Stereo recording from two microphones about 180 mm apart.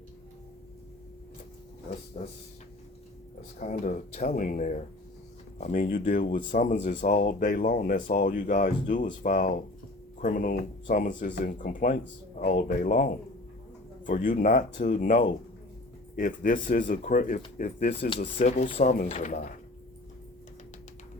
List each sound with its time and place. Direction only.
2.2 s speech: 35° left (ahead or behind)
3.6 s speech: 45° left (ahead or behind)